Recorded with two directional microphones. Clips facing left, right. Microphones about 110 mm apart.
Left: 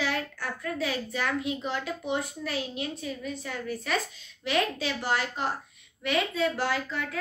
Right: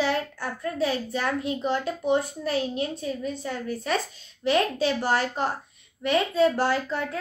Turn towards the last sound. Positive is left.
turn(degrees=-35)  # may be behind; listen again after turning